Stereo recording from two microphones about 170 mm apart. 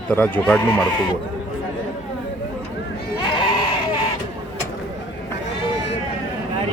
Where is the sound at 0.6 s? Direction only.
25° left (ahead or behind).